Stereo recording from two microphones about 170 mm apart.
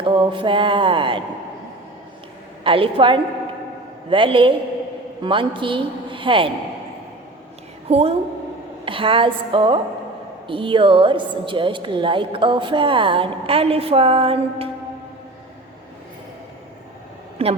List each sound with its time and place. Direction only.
0.0 s a woman's voice: 30° right (ahead or behind)
2.6 s a woman's voice: 30° right (ahead or behind)
7.9 s a woman's voice: 35° right (ahead or behind)
17.4 s a woman's voice: 35° right (ahead or behind)